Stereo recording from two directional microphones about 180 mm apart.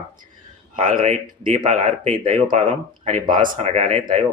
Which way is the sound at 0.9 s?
45° right (ahead or behind).